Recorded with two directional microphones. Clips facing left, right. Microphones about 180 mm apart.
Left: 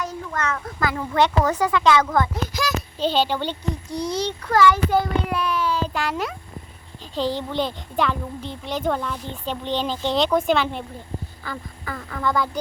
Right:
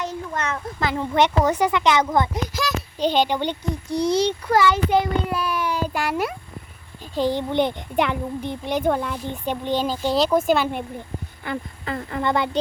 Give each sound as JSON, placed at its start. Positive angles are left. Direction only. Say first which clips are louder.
{"t": 0.0, "sound": "a child's voice", "louder": "even", "side_deg": -25}
{"t": 2.5, "sound": "a sound", "louder": "even", "side_deg": 0}
{"t": 3.0, "sound": "a child's voice", "louder": "right 2 dB", "side_deg": -15}
{"t": 5.3, "sound": "a child's voice", "louder": "left 1 dB", "side_deg": -5}
{"t": 5.5, "sound": "a sound", "louder": "even", "side_deg": -15}
{"t": 7.2, "sound": "a child's voice", "louder": "right 3 dB", "side_deg": -15}
{"t": 11.4, "sound": "speech", "louder": "right 8 dB", "side_deg": -25}